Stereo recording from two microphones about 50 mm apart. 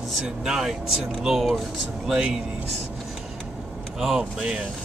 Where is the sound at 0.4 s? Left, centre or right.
Centre.